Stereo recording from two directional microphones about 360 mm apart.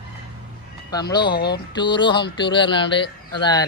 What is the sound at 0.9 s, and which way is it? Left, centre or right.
Speech, centre.